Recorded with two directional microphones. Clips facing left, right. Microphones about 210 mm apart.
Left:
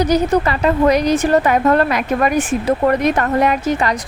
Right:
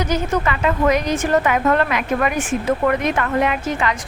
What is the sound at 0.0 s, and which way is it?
A woman's voice, 35° left (ahead or behind).